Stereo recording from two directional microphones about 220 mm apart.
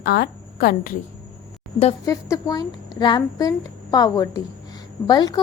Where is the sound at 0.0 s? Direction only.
45° left (ahead or behind).